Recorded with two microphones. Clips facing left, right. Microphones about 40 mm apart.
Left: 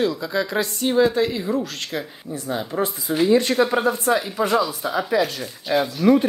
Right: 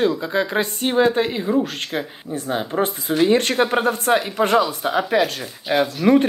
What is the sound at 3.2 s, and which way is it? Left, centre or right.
Speech, right.